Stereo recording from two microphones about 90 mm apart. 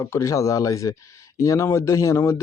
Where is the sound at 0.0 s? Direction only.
35° left (ahead or behind).